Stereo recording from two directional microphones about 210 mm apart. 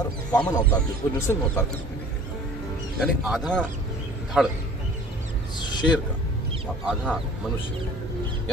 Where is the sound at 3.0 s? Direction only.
Centre (ahead or behind).